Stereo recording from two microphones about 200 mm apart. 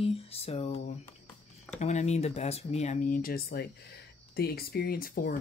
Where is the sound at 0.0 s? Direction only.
30° left (ahead or behind).